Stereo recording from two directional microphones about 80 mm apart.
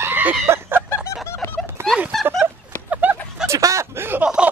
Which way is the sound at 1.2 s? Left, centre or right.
Left.